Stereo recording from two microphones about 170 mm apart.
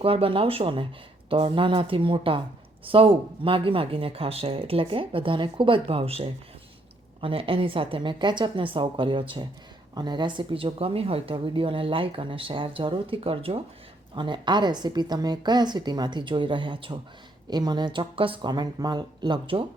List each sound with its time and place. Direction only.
0.0 s a woman's voice: 35° right (ahead or behind)